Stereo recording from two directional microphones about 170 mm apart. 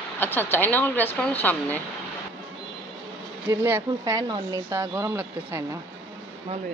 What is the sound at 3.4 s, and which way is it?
Speech, 10° right (ahead or behind).